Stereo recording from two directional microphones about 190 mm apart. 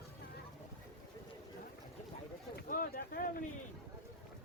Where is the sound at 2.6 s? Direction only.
50° left (ahead or behind).